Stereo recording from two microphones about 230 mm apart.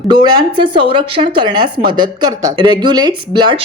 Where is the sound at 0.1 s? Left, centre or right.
Centre.